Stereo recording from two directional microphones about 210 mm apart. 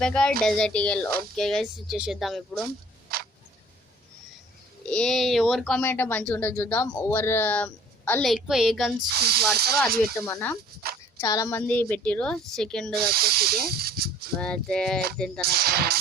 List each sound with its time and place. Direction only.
0.0 s speech: 5° left (ahead or behind)
2.6 s camera: 45° right (ahead or behind)
4.9 s speech: 5° left (ahead or behind)
9.1 s speech: 50° right (ahead or behind)
10.2 s speech: 15° left (ahead or behind)
12.9 s speech: 45° right (ahead or behind)
14.4 s speech: 5° left (ahead or behind)
15.4 s speech: 45° right (ahead or behind)